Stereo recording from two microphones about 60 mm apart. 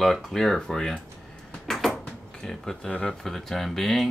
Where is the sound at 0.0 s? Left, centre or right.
Centre.